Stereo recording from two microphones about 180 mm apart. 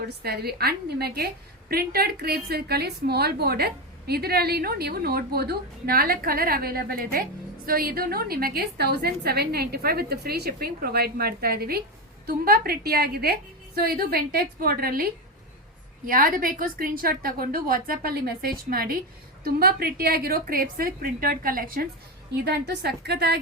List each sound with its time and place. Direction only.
0.2 s a woman's voice: 60° right (ahead or behind)
16.0 s a woman's voice: 50° right (ahead or behind)
22.4 s a woman's voice: 65° right (ahead or behind)